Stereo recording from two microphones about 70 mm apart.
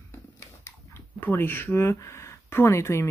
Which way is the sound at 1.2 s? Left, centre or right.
Left.